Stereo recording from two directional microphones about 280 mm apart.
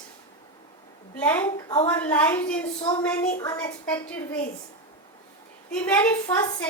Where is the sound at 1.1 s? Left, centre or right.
Centre.